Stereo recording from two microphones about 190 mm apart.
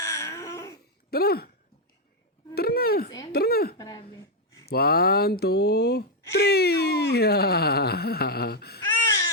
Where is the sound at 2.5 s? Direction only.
55° left (ahead or behind).